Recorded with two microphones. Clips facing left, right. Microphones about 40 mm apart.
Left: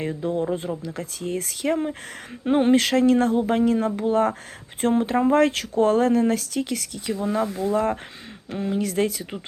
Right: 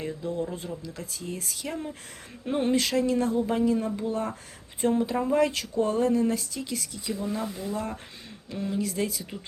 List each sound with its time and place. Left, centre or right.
0.0 s speech: left
2.7 s speech: left
7.1 s speech: left
7.6 s speech: left
8.4 s speech: left
8.8 s speech: left